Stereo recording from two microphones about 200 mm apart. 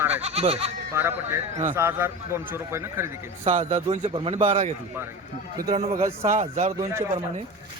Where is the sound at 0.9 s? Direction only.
10° right (ahead or behind).